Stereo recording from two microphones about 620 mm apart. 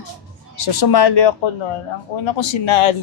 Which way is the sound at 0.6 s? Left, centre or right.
Left.